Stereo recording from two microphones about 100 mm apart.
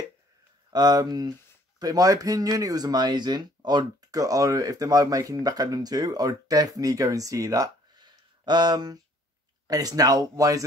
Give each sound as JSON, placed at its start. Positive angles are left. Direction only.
{"t": 0.7, "sound": "speech", "side_deg": -45}